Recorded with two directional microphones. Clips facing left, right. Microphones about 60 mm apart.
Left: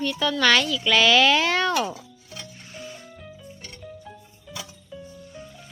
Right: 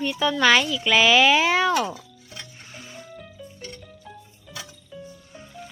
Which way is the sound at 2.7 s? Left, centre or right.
Right.